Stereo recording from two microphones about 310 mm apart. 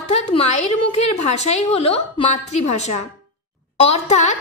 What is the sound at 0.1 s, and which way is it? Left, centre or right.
A woman's voice, left.